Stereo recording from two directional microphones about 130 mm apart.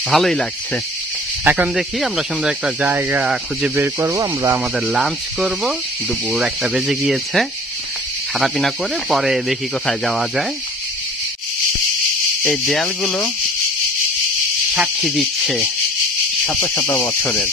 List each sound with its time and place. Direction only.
0.1 s speech: centre (ahead or behind)
1.4 s speech: 15° right (ahead or behind)
1.8 s speech: centre (ahead or behind)
4.1 s speech: 25° right (ahead or behind)
4.7 s speech: 5° right (ahead or behind)
12.4 s speech: centre (ahead or behind)
14.7 s speech: 5° right (ahead or behind)
16.7 s speech: 20° left (ahead or behind)